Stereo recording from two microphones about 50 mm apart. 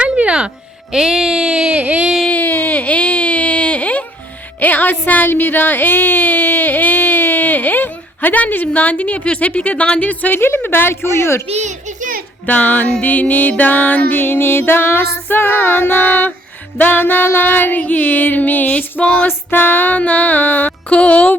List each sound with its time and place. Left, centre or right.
0.0 s speech: right
1.8 s a sound: right
2.3 s baby cry: left
4.6 s a woman's voice: left
10.0 s music: left
11.0 s speech: left
12.5 s a woman's voice: left
13.0 s music: left
14.7 s female singing: left
16.7 s music: left